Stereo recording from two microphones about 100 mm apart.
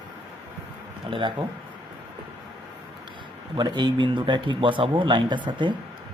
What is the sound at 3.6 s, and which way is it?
Speech, 45° right (ahead or behind).